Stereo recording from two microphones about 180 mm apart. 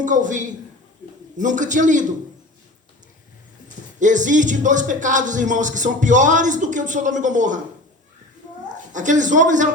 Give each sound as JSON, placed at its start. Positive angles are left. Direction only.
{"t": 0.0, "sound": "speech", "side_deg": -45}
{"t": 4.0, "sound": "speech", "side_deg": -45}
{"t": 8.7, "sound": "speech", "side_deg": -45}